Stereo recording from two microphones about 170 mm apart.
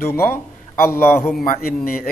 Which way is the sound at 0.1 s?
15° left (ahead or behind).